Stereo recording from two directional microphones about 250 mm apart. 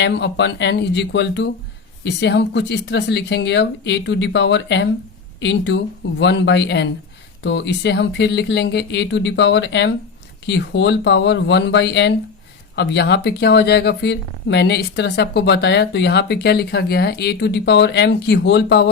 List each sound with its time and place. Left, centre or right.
0.0 s speech: left